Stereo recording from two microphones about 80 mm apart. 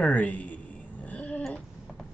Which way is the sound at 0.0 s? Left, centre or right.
Centre.